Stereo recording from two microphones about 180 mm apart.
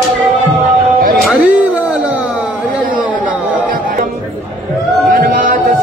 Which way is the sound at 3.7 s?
50° right (ahead or behind).